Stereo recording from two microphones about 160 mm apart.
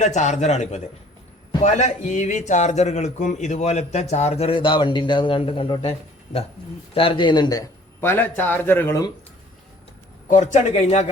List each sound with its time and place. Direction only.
0.0 s a man's voice: 45° left (ahead or behind); by 7.6 s 25° left (ahead or behind)
8.0 s a man's voice: 10° left (ahead or behind)
10.2 s a man's voice: 50° left (ahead or behind)